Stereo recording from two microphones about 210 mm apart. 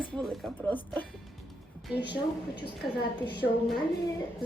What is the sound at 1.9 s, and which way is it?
Speech, 55° left (ahead or behind).